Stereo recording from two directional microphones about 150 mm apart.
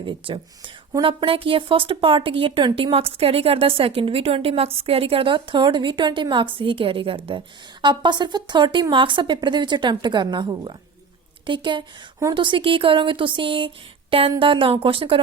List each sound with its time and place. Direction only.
0.2 s speech: 35° right (ahead or behind)